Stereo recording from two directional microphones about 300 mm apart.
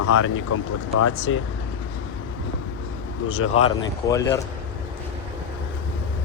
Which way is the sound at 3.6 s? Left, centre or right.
Centre.